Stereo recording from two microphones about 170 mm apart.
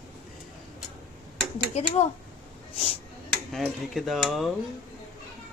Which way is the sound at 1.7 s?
40° left (ahead or behind).